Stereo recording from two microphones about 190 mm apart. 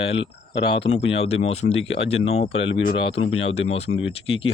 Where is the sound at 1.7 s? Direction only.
75° left (ahead or behind).